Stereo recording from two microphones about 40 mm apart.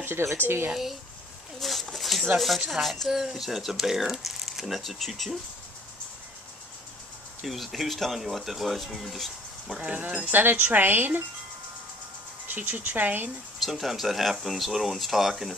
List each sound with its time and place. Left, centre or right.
0.0 s speech: right
1.6 s a sound: centre
2.3 s speech: centre
7.4 s speech: centre
10.2 s speech: right
12.4 s speech: right
13.6 s speech: centre